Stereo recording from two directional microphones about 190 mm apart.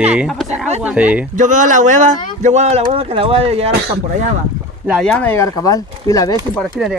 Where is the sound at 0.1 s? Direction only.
5° right (ahead or behind).